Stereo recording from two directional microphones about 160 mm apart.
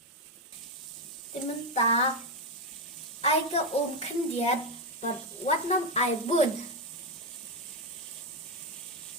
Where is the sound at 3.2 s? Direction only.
40° left (ahead or behind).